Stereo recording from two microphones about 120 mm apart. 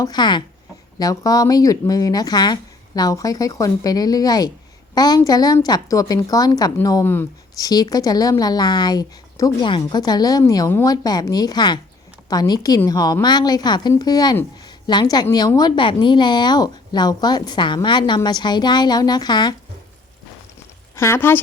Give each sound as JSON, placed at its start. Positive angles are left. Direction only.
{"t": 0.0, "sound": "speech", "side_deg": 35}
{"t": 7.0, "sound": "speech", "side_deg": 15}
{"t": 7.5, "sound": "speech", "side_deg": 30}
{"t": 20.9, "sound": "speech", "side_deg": 20}